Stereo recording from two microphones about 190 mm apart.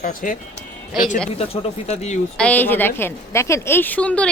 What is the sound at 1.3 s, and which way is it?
Speech, 35° left (ahead or behind).